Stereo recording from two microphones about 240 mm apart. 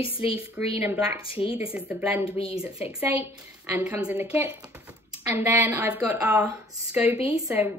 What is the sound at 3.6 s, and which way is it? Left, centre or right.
Speech, centre.